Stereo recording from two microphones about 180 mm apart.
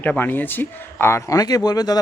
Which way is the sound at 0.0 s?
10° left (ahead or behind).